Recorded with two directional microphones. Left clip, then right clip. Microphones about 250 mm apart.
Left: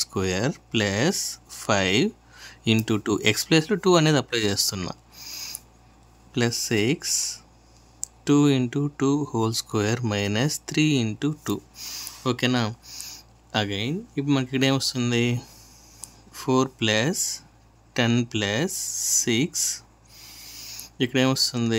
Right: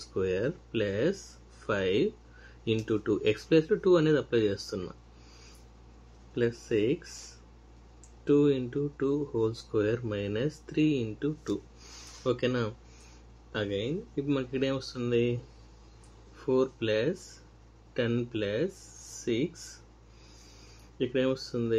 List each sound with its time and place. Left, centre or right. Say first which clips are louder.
0.0 s speech: left 4 dB; left
6.3 s speech: left 4 dB; left
8.2 s speech: left 4 dB; left
16.3 s speech: left 5 dB; left
21.0 s speech: left 7 dB; left